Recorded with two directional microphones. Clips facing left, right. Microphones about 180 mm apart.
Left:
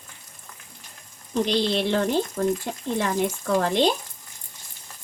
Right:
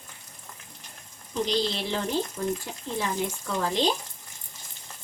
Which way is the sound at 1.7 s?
60° left (ahead or behind).